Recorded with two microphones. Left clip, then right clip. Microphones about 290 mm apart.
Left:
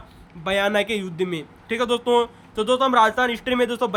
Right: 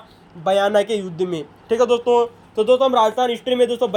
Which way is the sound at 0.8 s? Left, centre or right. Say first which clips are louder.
Right 4 dB; centre.